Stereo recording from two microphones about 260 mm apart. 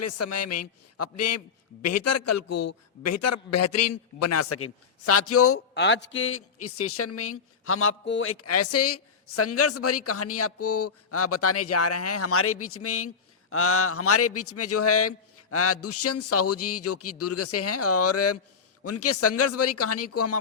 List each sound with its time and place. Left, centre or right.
0.0 s a man's voice: left
5.7 s a man's voice: left